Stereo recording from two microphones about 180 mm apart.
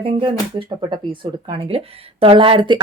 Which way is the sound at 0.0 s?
30° right (ahead or behind).